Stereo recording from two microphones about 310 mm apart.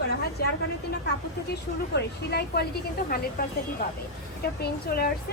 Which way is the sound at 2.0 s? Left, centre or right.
Left.